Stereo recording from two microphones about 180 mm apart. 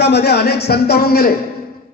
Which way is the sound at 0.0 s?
65° left (ahead or behind).